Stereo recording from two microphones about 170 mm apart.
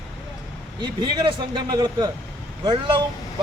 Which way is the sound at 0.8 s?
25° right (ahead or behind).